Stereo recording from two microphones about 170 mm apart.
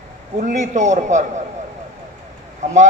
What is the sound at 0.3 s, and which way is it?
Speech, 50° right (ahead or behind).